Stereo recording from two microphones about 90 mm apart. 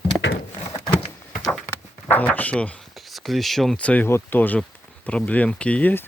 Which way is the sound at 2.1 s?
20° left (ahead or behind).